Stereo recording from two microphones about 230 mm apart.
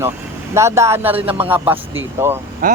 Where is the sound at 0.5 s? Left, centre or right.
Centre.